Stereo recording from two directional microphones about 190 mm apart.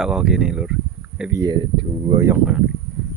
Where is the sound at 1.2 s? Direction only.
15° right (ahead or behind).